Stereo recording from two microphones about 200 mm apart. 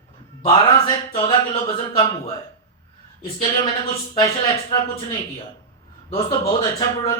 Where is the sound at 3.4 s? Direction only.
25° left (ahead or behind).